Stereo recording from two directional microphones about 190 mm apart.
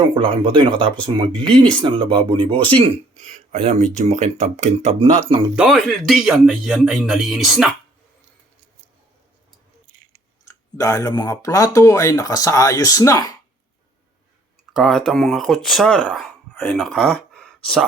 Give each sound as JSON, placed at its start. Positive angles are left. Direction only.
{"t": 0.1, "sound": "speech", "side_deg": -25}
{"t": 5.5, "sound": "speech", "side_deg": 0}
{"t": 10.4, "sound": "speech", "side_deg": 20}
{"t": 14.7, "sound": "speech", "side_deg": 0}